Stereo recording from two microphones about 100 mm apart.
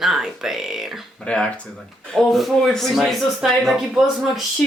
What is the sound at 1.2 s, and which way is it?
Speech, 10° left (ahead or behind).